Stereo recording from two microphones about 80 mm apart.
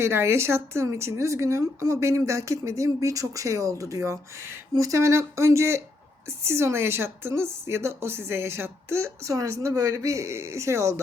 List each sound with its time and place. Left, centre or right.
0.0 s speech: right